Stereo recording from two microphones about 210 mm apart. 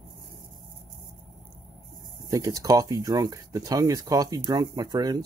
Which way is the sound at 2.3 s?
15° right (ahead or behind).